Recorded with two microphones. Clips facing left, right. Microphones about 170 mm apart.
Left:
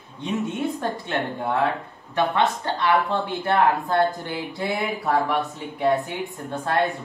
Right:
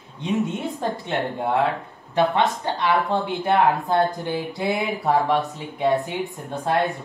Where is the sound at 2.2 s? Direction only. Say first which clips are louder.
Right 2 dB; 20° right (ahead or behind).